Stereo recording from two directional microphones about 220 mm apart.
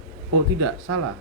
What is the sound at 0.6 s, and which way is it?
Speech, 90° right.